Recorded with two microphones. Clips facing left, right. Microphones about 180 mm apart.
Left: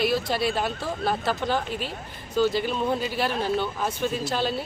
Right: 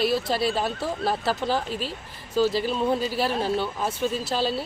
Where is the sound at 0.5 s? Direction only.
Centre (ahead or behind).